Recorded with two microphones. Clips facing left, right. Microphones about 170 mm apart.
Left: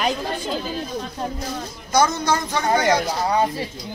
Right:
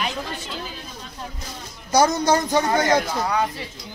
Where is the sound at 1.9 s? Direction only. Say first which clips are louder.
Right 2 dB; 35° right (ahead or behind).